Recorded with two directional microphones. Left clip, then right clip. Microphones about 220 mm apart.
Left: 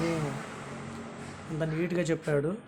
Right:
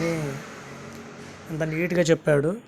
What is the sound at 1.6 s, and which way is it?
Speech, 25° right (ahead or behind).